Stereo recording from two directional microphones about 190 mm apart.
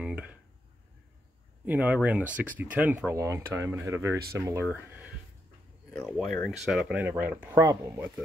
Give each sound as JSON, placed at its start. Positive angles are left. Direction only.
{"t": 0.0, "sound": "a sound", "side_deg": -5}
{"t": 1.7, "sound": "speech", "side_deg": -10}
{"t": 5.9, "sound": "speech", "side_deg": 5}